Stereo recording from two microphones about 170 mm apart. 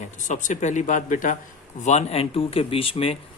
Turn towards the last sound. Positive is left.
turn(degrees=35)  # may be behind; listen again after turning